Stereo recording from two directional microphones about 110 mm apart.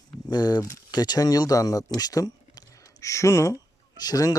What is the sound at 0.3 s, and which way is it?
Speech, 40° left (ahead or behind).